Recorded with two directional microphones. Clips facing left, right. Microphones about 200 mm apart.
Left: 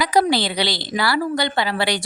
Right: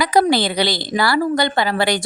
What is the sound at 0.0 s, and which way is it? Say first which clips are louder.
A woman's voice: right 2 dB; 50° right (ahead or behind).